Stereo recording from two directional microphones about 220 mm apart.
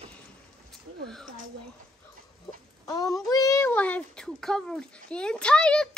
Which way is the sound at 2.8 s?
15° left (ahead or behind).